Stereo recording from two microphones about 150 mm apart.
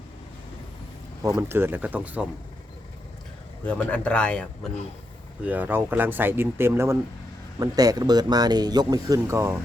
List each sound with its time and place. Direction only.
1.2 s speech: 20° right (ahead or behind)
3.6 s a man's voice: 10° left (ahead or behind)
5.5 s speech: 10° right (ahead or behind)